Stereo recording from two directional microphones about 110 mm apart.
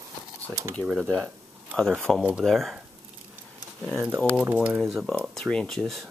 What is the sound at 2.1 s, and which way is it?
Speech, 5° right (ahead or behind).